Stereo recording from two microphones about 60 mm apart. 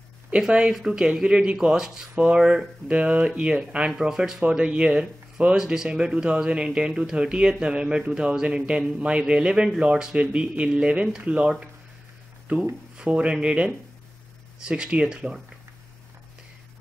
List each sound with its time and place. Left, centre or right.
0.5 s speech: centre